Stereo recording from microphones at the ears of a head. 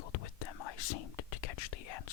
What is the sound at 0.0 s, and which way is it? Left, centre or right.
Whispering, left.